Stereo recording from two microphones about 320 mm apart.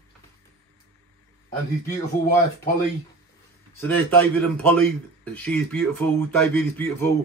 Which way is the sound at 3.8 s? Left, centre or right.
Centre.